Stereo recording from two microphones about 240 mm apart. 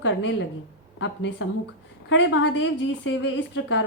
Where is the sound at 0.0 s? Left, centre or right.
Left.